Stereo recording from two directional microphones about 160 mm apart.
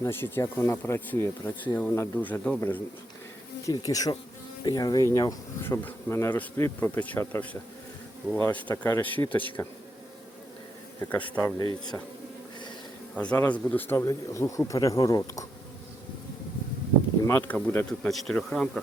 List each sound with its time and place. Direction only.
0.0 s speech: 15° left (ahead or behind)
3.7 s bee: 25° left (ahead or behind)
5.1 s speech: 20° left (ahead or behind)
11.0 s speech: 10° left (ahead or behind)
13.1 s speech: 10° left (ahead or behind)
17.2 s speech: 15° left (ahead or behind)